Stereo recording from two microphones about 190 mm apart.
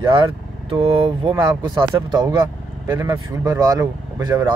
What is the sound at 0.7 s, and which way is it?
Speech, 25° right (ahead or behind).